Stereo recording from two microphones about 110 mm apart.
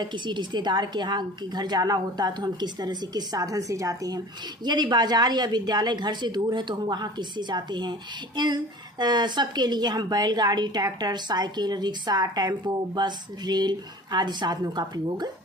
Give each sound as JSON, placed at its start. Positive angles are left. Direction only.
{"t": 0.0, "sound": "a woman's voice", "side_deg": -45}
{"t": 4.6, "sound": "a woman's voice", "side_deg": -40}